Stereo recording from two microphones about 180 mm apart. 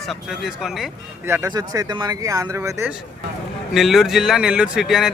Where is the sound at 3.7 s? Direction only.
Centre (ahead or behind).